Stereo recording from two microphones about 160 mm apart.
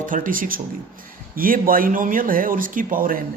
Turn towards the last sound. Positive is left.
turn(degrees=-60)  # may be behind; listen again after turning